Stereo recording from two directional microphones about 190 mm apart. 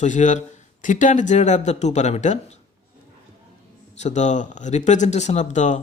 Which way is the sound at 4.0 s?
35° left (ahead or behind).